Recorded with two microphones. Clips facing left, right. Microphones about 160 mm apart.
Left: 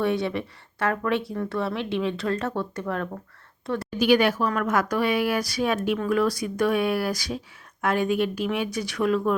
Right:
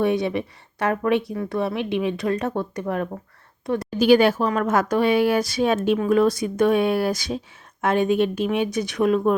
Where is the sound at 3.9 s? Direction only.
30° right (ahead or behind).